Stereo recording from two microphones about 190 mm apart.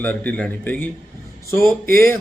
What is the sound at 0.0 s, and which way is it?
A man's voice, 10° left (ahead or behind).